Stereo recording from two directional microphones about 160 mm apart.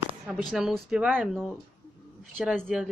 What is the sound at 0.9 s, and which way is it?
Speech, 10° right (ahead or behind).